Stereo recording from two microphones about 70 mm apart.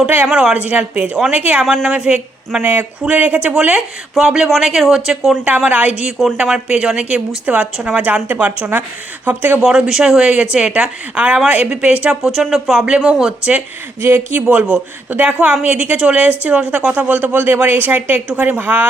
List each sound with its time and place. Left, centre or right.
0.3 s speech: centre
1.6 s speech: centre
1.9 s speech: centre
2.6 s speech: right
4.4 s speech: centre
5.5 s speech: right
9.6 s speech: centre
12.8 s speech: centre
14.0 s speech: right